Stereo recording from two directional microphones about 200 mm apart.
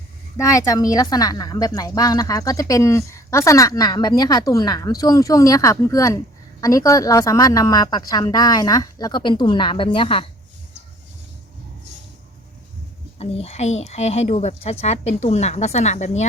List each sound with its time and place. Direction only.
0.3 s a woman's voice: 15° left (ahead or behind)
13.1 s speech: 30° left (ahead or behind)